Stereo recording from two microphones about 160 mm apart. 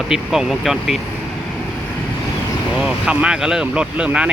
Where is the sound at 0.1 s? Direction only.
Centre (ahead or behind).